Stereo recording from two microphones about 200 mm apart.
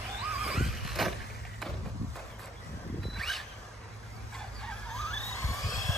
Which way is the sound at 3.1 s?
Centre (ahead or behind).